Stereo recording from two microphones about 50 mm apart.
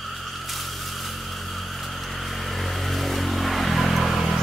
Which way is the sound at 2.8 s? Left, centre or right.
Centre.